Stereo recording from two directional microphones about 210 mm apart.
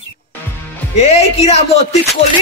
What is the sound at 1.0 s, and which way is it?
Speech, 30° left (ahead or behind).